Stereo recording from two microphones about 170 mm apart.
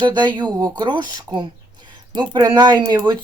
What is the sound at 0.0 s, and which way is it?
Speech, 25° right (ahead or behind).